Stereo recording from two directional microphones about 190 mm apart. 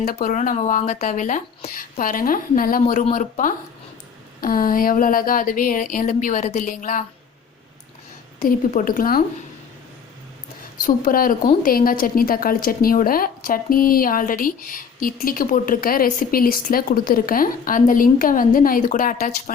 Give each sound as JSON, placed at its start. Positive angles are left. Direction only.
{"t": 0.0, "sound": "a woman's voice", "side_deg": 50}
{"t": 8.4, "sound": "a woman's voice", "side_deg": 45}
{"t": 10.8, "sound": "a woman's voice", "side_deg": 45}